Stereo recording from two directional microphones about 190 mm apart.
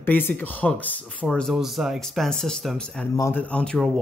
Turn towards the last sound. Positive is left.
turn(degrees=5)  # may be behind; listen again after turning